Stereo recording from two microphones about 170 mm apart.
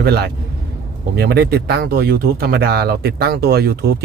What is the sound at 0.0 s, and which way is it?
Speech, 65° right (ahead or behind).